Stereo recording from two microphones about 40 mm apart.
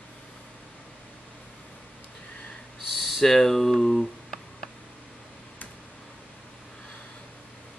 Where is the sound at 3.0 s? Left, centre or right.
Centre.